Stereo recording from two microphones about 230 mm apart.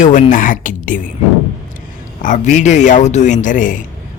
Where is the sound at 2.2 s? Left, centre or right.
Left.